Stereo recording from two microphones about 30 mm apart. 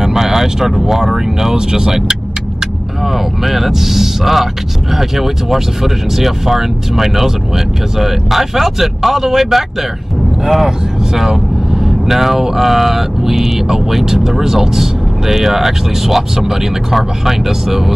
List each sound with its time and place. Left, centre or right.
0.0 s vehicle: centre
0.7 s speech: centre
3.1 s speech: centre